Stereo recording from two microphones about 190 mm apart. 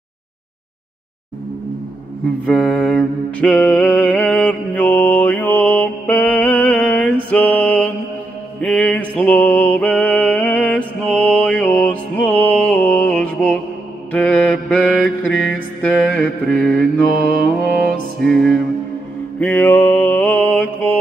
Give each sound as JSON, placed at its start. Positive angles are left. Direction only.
{"t": 2.4, "sound": "mantra", "side_deg": 5}
{"t": 17.6, "sound": "music", "side_deg": 5}
{"t": 19.4, "sound": "mantra", "side_deg": 10}